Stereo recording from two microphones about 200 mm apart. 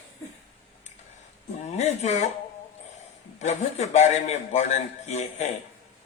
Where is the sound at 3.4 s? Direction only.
35° left (ahead or behind).